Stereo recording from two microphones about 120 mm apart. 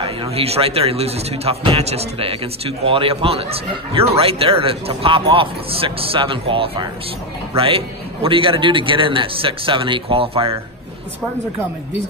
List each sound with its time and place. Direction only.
0.0 s a man's voice: 55° right (ahead or behind)